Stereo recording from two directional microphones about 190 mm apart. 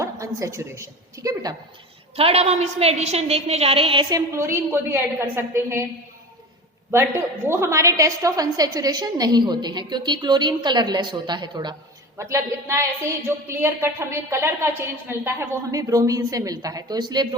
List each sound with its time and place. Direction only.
0.0 s a woman's voice: 15° right (ahead or behind)
2.1 s a woman's voice: 30° right (ahead or behind)
4.4 s a woman's voice: 15° right (ahead or behind)
6.9 s a woman's voice: 15° right (ahead or behind)